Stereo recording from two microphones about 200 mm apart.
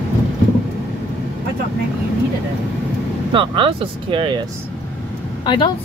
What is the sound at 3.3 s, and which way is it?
Speech, 25° right (ahead or behind).